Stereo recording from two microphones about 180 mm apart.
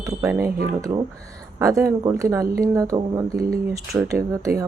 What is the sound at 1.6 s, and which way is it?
Speech, 15° right (ahead or behind).